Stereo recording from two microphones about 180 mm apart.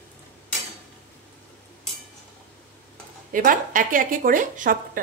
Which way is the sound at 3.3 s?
50° right (ahead or behind).